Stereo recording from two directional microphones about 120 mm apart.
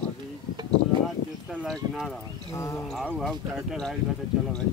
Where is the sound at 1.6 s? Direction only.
Centre (ahead or behind).